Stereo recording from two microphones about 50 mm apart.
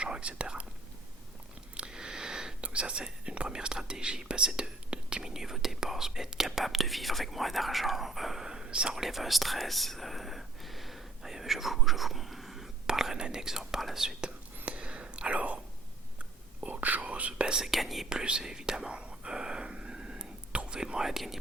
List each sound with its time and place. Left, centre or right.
0.0 s whispering: right
1.7 s whispering: centre
2.6 s speech: right; by 8.4 s centre
8.4 s whispering: centre
9.0 s whispering: centre
12.9 s speech: centre
14.2 s whispering: right
17.4 s speech: centre
17.7 s speech: centre
18.1 s speech: centre
18.9 s whispering: centre